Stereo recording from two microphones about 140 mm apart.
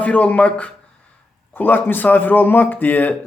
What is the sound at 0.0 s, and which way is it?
Speech, 10° left (ahead or behind).